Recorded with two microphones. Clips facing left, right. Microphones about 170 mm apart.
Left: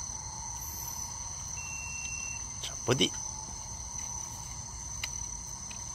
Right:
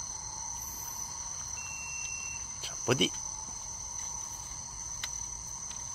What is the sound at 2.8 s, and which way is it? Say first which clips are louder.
Cricket: even; 5° right (ahead or behind).